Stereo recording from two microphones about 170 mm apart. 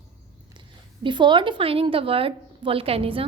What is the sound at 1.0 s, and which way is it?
A woman's voice, 30° right (ahead or behind).